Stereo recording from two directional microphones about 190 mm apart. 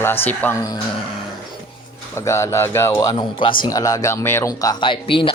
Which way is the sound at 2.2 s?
15° left (ahead or behind).